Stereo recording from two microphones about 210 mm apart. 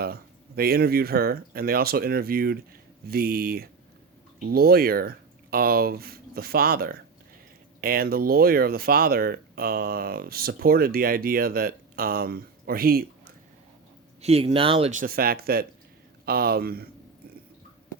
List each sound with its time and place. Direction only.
0.0 s speech: 45° right (ahead or behind)
14.2 s speech: 30° right (ahead or behind); by 16.9 s 45° right (ahead or behind)